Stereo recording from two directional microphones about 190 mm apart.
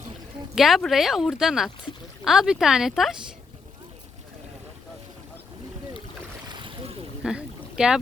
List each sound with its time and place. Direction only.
0.5 s speech: centre (ahead or behind)
6.5 s boat: 25° right (ahead or behind)
7.2 s boat: 5° right (ahead or behind)